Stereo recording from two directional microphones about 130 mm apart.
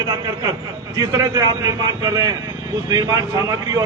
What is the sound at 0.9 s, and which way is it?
A man's voice, 30° right (ahead or behind).